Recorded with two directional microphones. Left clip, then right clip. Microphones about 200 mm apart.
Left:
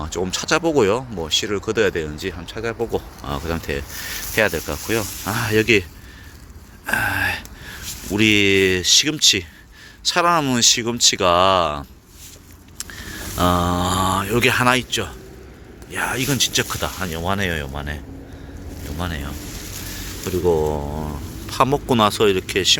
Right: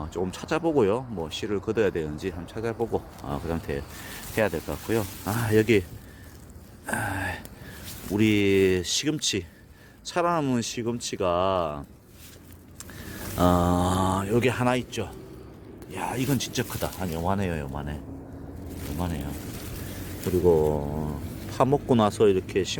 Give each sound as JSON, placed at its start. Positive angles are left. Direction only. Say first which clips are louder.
{"t": 0.0, "sound": "speech", "louder": "left 8 dB", "side_deg": 10}
{"t": 6.8, "sound": "a sound", "louder": "left 10 dB", "side_deg": -10}
{"t": 8.1, "sound": "speech", "louder": "left 7 dB", "side_deg": -10}
{"t": 12.8, "sound": "speech", "louder": "left 8 dB", "side_deg": -15}
{"t": 20.3, "sound": "speech", "louder": "left 2 dB", "side_deg": -15}
{"t": 20.7, "sound": "speech", "louder": "left 3 dB", "side_deg": 0}
{"t": 21.5, "sound": "speech", "louder": "left 5 dB", "side_deg": -10}